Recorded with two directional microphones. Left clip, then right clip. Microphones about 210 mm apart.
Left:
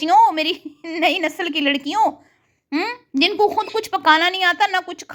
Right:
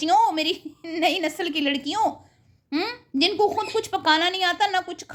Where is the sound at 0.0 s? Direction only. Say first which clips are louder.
Left 5 dB; 15° left (ahead or behind).